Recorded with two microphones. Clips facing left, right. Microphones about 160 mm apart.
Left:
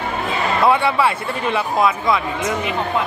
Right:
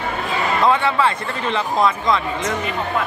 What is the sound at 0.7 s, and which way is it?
Speech, 10° left (ahead or behind).